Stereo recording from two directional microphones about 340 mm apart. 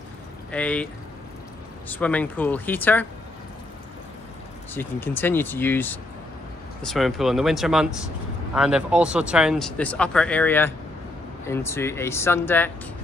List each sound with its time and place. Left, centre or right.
0.5 s speech: centre
1.9 s speech: centre
4.7 s speech: centre